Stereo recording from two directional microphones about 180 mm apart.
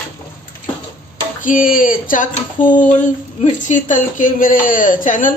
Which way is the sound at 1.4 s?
50° left (ahead or behind).